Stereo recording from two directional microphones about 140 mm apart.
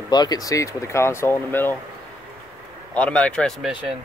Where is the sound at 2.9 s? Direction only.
10° left (ahead or behind).